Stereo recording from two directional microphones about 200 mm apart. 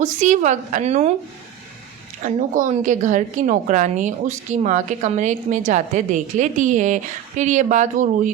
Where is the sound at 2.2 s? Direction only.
40° right (ahead or behind).